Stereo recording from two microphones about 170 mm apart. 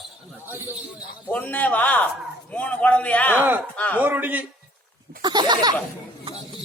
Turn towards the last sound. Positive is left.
turn(degrees=-25)  # may be behind; listen again after turning